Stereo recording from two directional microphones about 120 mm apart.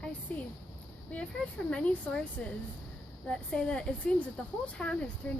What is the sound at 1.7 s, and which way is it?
A woman's voice, 10° left (ahead or behind).